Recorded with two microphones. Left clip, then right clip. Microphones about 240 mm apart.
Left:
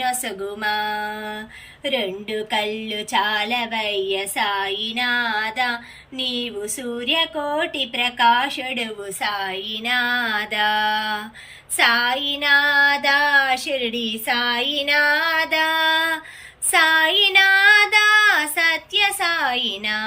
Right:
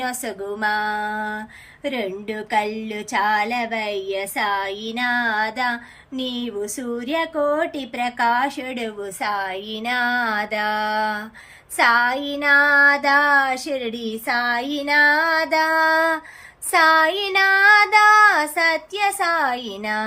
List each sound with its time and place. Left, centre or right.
0.0 s a woman's voice: centre